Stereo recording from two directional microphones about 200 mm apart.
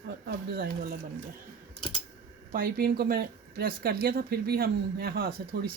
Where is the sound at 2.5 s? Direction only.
45° right (ahead or behind).